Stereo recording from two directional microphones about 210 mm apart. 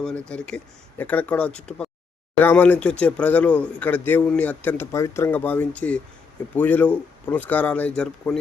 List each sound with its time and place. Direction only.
0.0 s a man's voice: 5° left (ahead or behind)